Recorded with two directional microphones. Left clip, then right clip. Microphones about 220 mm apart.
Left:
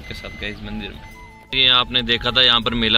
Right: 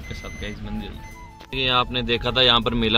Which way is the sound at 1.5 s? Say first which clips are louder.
Left 6 dB; 15° right (ahead or behind).